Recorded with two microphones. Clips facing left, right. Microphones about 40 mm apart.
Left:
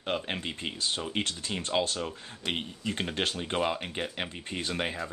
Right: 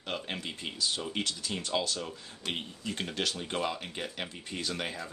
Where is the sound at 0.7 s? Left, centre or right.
Left.